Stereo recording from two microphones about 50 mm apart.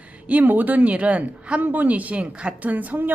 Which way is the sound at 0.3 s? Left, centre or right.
Right.